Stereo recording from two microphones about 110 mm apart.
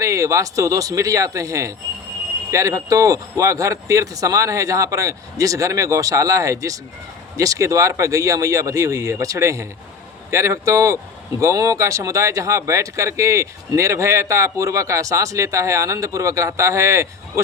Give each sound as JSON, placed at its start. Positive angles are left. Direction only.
{"t": 0.0, "sound": "speech", "side_deg": -30}